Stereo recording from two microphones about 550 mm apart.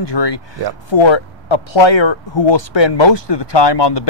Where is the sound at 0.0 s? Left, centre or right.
Left.